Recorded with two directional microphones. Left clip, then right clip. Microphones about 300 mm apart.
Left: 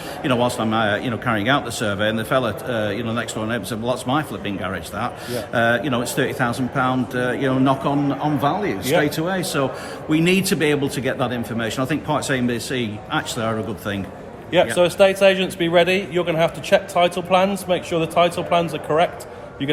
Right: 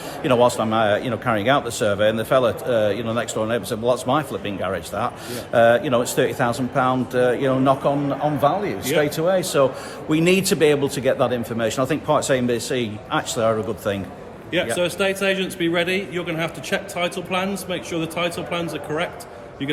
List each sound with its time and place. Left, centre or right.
0.2 s a man's voice: centre
14.8 s a man's voice: centre